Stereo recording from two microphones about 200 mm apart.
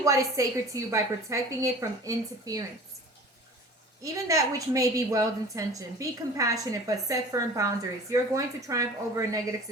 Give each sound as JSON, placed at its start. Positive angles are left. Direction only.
{"t": 0.0, "sound": "a woman's voice", "side_deg": -15}
{"t": 4.0, "sound": "a woman's voice", "side_deg": -15}